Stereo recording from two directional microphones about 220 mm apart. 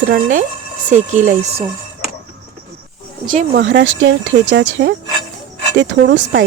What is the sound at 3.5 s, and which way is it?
Speech, 55° right (ahead or behind).